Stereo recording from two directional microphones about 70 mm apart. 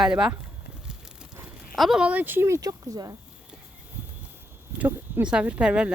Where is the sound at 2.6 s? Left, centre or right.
Right.